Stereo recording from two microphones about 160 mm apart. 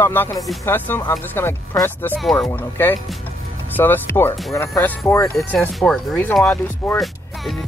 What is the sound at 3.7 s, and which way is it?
Speech, 10° left (ahead or behind).